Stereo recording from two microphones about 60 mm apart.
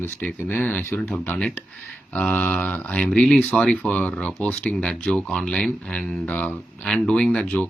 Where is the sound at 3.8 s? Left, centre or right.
Left.